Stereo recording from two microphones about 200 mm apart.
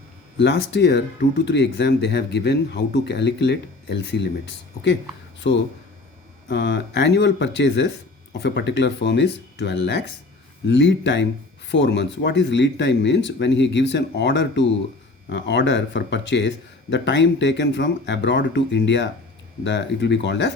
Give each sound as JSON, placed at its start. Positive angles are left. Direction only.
{"t": 0.3, "sound": "speech", "side_deg": 55}
{"t": 5.4, "sound": "speech", "side_deg": 65}